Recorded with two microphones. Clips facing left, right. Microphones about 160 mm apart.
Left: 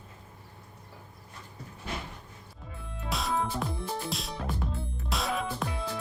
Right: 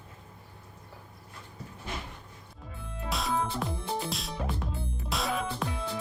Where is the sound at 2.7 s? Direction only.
Centre (ahead or behind).